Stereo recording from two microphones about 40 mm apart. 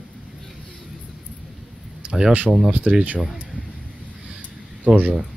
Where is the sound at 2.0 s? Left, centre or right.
Right.